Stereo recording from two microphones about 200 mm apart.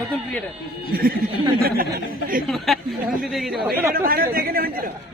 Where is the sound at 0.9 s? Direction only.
50° right (ahead or behind).